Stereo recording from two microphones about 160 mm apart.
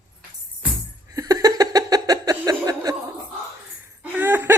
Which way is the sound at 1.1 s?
25° right (ahead or behind).